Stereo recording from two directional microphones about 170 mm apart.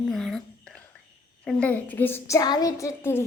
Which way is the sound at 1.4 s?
5° left (ahead or behind).